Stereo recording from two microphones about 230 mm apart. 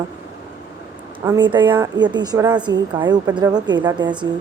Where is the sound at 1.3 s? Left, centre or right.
Centre.